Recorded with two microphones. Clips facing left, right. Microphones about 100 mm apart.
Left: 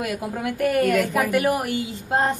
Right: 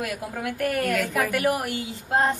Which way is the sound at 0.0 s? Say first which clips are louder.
Left 3 dB; 15° left (ahead or behind).